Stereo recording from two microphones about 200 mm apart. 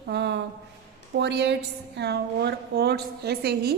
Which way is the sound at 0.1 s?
60° right (ahead or behind).